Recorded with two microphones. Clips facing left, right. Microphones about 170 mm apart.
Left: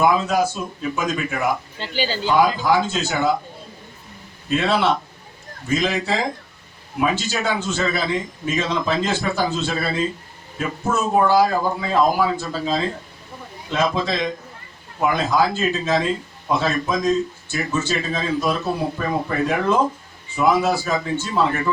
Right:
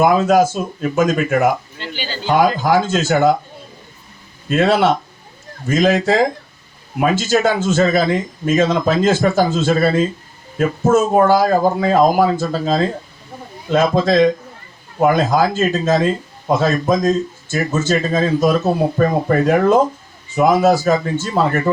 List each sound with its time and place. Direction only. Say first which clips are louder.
0.0 s speech: right 5 dB; 45° right (ahead or behind)
4.4 s speech: right 5 dB; 45° right (ahead or behind)